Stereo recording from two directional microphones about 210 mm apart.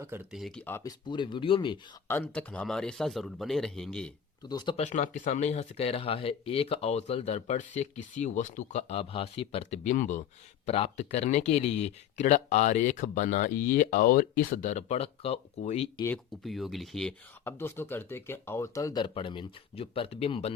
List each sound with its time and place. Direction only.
0.0 s speech: 5° right (ahead or behind); by 0.9 s 10° left (ahead or behind)
1.0 s speech: 20° left (ahead or behind)
2.0 s speech: 10° left (ahead or behind)
4.4 s speech: 20° left (ahead or behind)
4.8 s speech: 35° left (ahead or behind)
16.0 s speech: 5° left (ahead or behind); by 20.5 s 30° left (ahead or behind)